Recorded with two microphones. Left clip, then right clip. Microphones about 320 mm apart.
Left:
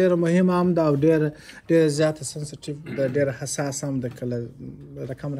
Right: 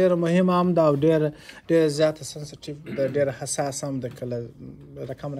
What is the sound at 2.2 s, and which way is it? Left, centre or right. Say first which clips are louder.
Speech: left 2 dB; right.